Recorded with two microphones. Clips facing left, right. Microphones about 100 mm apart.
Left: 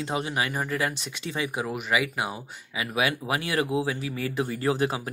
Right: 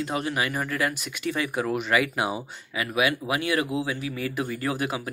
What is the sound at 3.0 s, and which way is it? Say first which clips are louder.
Speech: right 2 dB; 30° left (ahead or behind).